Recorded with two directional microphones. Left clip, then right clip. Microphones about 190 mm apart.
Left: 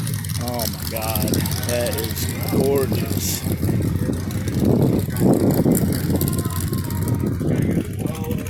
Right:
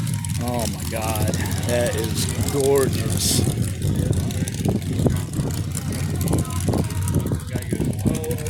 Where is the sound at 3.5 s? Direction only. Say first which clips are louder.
Left 3 dB; 50° right (ahead or behind).